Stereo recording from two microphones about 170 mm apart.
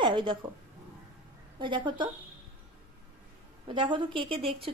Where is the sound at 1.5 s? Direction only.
25° right (ahead or behind).